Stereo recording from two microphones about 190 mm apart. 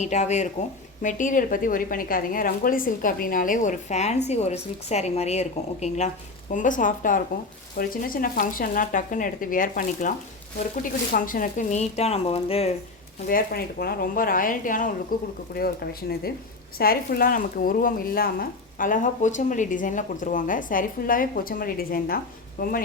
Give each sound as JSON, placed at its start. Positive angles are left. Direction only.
{"t": 0.0, "sound": "speech", "side_deg": 35}
{"t": 13.2, "sound": "speech", "side_deg": 50}